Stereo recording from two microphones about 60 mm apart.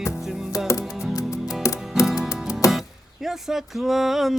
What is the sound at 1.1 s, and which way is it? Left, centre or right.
Music, left.